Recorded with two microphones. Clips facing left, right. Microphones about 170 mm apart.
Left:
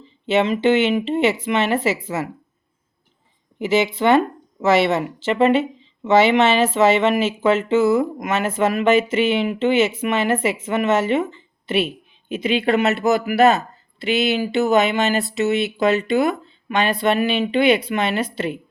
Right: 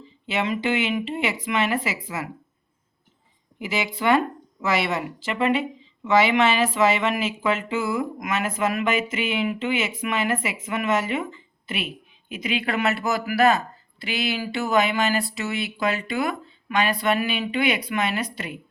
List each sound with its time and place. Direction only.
0.3 s speech: 25° left (ahead or behind)
3.6 s speech: 25° left (ahead or behind)